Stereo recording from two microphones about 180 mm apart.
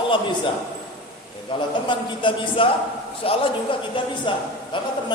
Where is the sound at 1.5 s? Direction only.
25° left (ahead or behind).